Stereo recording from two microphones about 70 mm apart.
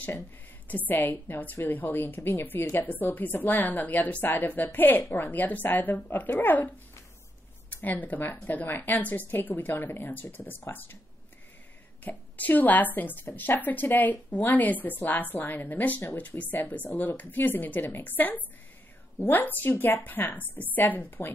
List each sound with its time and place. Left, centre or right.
0.7 s a woman's voice: left
7.8 s a woman's voice: left
12.0 s a woman's voice: left